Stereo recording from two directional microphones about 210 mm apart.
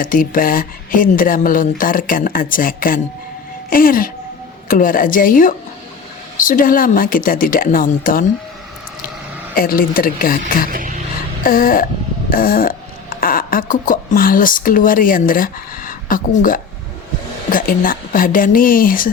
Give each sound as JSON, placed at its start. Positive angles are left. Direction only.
{"t": 0.0, "sound": "speech", "side_deg": 40}
{"t": 9.6, "sound": "speech", "side_deg": 45}
{"t": 10.7, "sound": "a sound", "side_deg": -40}
{"t": 11.4, "sound": "speech", "side_deg": 40}